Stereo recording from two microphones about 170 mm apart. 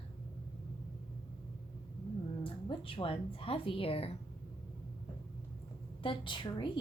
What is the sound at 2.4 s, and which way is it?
Speech, 30° left (ahead or behind).